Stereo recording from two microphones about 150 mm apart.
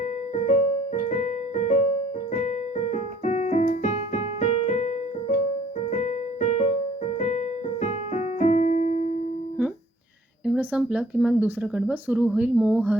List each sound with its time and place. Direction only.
0.0 s keyboard: 55° left (ahead or behind)
10.4 s speech: 10° right (ahead or behind)